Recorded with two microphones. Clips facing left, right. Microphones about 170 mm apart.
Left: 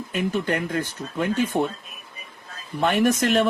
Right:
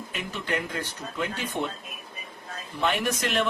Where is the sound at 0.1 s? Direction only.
45° left (ahead or behind).